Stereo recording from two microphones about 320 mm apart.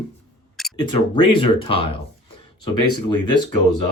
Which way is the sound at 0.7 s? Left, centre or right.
Centre.